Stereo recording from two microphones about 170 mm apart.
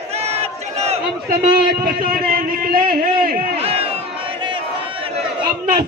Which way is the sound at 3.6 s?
35° right (ahead or behind).